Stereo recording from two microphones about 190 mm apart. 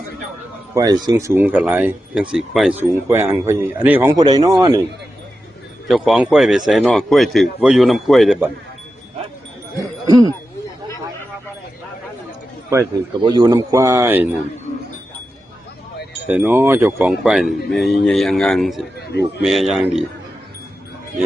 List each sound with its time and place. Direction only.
0.7 s speech: 20° right (ahead or behind)
5.9 s speech: centre (ahead or behind)
10.1 s speech: 20° right (ahead or behind)
12.7 s speech: 20° right (ahead or behind)
16.2 s speech: 10° right (ahead or behind)